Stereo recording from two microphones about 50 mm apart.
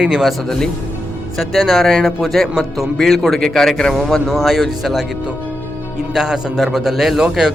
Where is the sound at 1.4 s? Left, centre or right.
Centre.